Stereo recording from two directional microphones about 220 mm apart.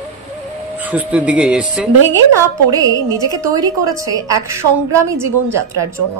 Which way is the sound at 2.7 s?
15° right (ahead or behind).